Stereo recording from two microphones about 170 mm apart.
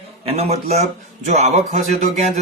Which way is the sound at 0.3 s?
35° right (ahead or behind).